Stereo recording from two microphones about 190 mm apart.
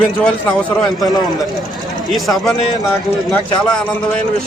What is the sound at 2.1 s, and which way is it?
Speech, centre (ahead or behind).